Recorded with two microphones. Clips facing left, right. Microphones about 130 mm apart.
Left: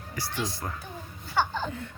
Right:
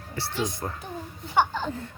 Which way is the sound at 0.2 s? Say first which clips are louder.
Right 3 dB; 20° right (ahead or behind).